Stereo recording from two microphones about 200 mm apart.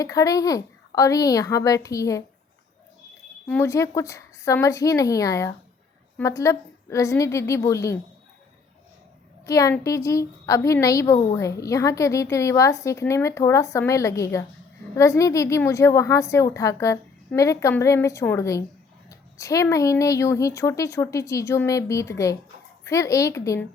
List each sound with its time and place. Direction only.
0.0 s a woman's voice: 15° left (ahead or behind)
3.4 s a woman's voice: 10° left (ahead or behind)
9.5 s a woman's voice: 15° left (ahead or behind)